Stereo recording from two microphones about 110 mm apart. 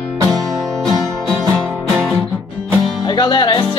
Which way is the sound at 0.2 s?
35° right (ahead or behind).